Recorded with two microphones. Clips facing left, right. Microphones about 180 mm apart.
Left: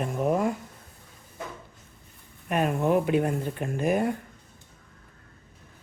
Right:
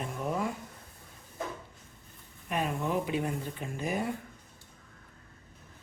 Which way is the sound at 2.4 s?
55° left (ahead or behind).